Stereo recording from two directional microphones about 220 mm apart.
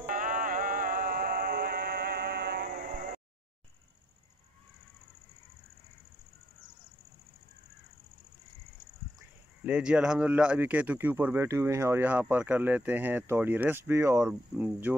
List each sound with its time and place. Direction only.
0.0 s music: 40° right (ahead or behind)
9.7 s speech: 5° right (ahead or behind)